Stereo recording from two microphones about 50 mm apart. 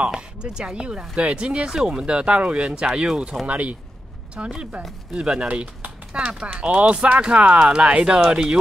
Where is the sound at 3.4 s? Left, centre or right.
Right.